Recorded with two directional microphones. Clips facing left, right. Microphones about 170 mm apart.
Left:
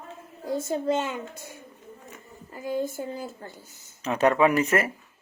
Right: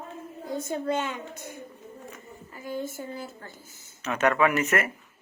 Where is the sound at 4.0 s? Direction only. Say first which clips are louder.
Left 3 dB; 30° left (ahead or behind).